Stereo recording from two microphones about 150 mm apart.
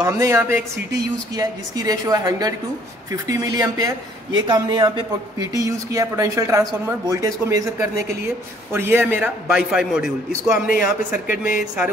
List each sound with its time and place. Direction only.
0.0 s a man's voice: 20° right (ahead or behind); by 10.1 s 5° right (ahead or behind)
10.7 s speech: 65° left (ahead or behind)